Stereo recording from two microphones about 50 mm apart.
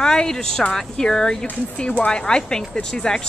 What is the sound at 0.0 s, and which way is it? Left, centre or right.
Speech, centre.